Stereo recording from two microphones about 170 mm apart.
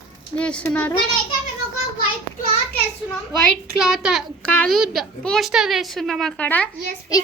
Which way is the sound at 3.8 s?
Centre (ahead or behind).